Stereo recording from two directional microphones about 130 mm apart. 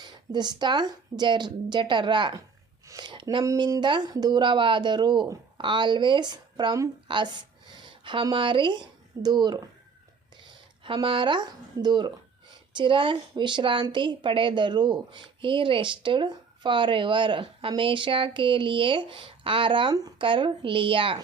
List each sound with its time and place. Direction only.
0.0 s a woman's voice: 35° right (ahead or behind)
2.8 s a sound: 25° right (ahead or behind)
3.1 s speech: 40° right (ahead or behind)
3.4 s a woman's voice: 25° right (ahead or behind)
10.8 s a woman's voice: 40° right (ahead or behind)